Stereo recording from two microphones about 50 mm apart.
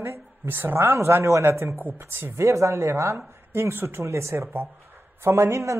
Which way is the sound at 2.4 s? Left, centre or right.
Right.